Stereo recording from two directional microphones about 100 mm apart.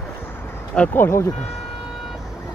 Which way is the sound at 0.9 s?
25° left (ahead or behind).